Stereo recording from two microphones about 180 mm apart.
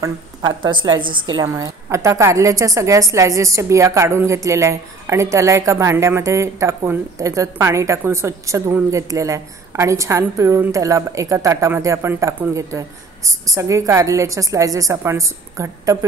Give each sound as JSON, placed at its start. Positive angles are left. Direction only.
{"t": 0.0, "sound": "a woman's voice", "side_deg": -25}